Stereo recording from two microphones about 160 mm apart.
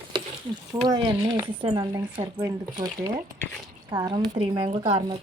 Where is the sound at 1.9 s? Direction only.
20° right (ahead or behind).